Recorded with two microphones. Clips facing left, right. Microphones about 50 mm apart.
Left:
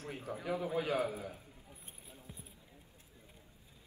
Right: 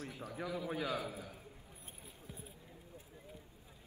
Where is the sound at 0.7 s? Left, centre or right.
Left.